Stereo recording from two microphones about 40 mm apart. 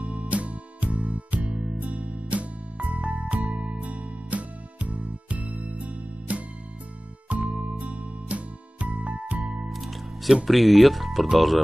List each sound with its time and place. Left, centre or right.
0.0 s music: right
9.7 s music: centre
10.4 s speech: centre